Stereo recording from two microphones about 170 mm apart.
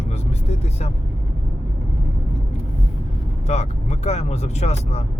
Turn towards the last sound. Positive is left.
turn(degrees=40)  # may be behind; listen again after turning